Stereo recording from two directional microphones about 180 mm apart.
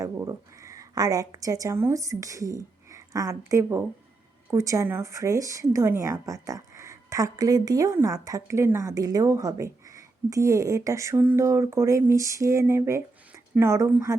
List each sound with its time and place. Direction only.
0.0 s a woman's voice: 15° right (ahead or behind)